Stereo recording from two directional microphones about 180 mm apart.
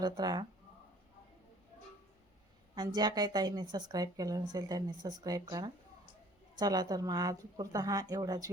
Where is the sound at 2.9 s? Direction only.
25° right (ahead or behind).